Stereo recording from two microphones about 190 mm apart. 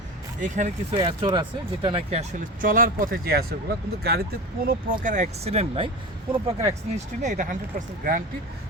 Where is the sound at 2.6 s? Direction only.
45° right (ahead or behind); by 5.9 s 30° right (ahead or behind).